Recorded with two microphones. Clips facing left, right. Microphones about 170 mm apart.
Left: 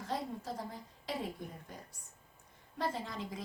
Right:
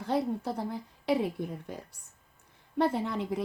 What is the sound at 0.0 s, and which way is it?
A woman's voice, 65° right (ahead or behind).